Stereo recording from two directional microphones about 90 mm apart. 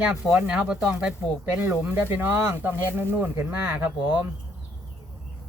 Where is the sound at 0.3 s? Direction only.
15° right (ahead or behind).